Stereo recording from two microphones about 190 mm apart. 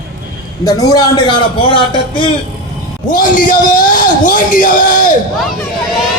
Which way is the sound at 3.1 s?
45° left (ahead or behind).